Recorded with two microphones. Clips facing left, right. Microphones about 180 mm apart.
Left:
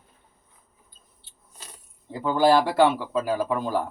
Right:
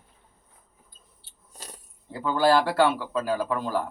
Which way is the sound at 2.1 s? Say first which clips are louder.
Left 2 dB; 15° left (ahead or behind).